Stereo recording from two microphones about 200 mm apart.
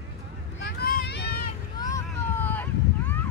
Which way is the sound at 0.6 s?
55° left (ahead or behind).